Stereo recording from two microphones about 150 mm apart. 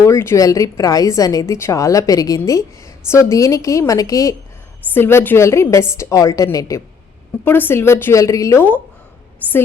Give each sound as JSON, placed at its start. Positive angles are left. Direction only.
{"t": 0.0, "sound": "a woman's voice", "side_deg": 15}